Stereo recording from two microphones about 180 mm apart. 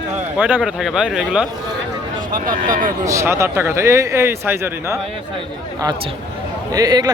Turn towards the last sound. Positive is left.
turn(degrees=-20)  # may be behind; listen again after turning